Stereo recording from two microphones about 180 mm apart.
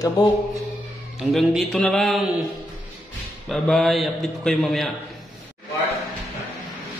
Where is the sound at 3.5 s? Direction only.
Centre (ahead or behind).